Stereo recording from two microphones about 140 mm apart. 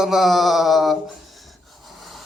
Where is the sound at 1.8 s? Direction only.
Centre (ahead or behind).